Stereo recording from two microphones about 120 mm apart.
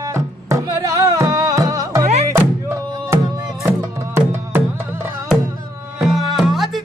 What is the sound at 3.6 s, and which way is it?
Music, 20° right (ahead or behind).